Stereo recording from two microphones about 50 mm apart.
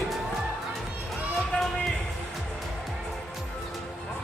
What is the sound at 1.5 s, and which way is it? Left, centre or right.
Music, left.